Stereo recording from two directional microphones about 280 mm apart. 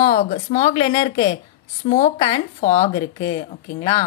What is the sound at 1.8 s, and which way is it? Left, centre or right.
Speech, left.